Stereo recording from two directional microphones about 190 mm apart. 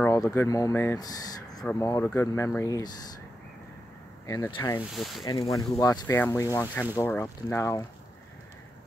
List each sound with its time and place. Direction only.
0.0 s speech: 15° left (ahead or behind)
4.3 s speech: 15° left (ahead or behind)
4.9 s speech: centre (ahead or behind)
5.5 s speech: 15° left (ahead or behind)